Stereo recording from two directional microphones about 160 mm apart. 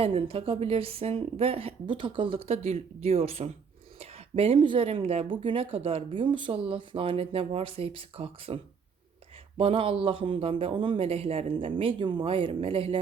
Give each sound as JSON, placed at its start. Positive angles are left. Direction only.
{"t": 0.0, "sound": "speech", "side_deg": -35}
{"t": 9.6, "sound": "speech", "side_deg": -35}